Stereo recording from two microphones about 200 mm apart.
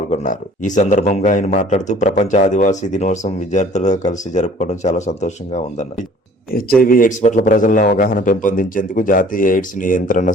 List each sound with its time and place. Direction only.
0.1 s a man's voice: 35° left (ahead or behind)